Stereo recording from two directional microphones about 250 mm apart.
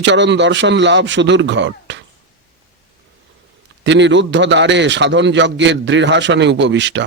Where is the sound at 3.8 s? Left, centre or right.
Right.